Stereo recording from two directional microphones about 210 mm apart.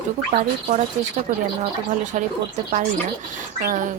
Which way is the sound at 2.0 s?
35° right (ahead or behind).